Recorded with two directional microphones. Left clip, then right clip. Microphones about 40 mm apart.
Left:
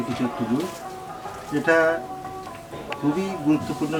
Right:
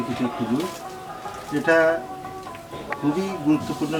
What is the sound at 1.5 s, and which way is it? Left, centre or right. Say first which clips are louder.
Speech: right 1 dB; centre.